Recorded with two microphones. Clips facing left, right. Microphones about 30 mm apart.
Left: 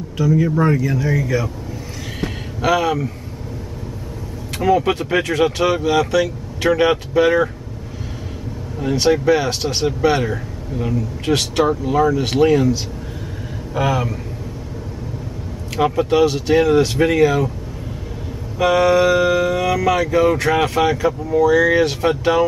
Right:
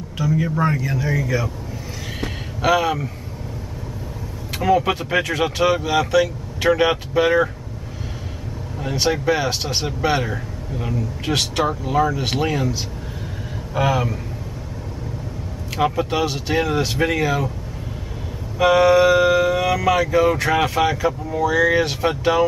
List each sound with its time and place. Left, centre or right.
0.2 s speech: centre
2.2 s vehicle: centre
4.6 s speech: centre
8.7 s speech: centre
13.7 s speech: centre
15.7 s speech: centre
18.6 s speech: centre